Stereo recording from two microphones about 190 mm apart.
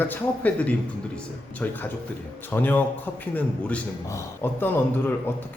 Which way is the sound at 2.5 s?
10° left (ahead or behind).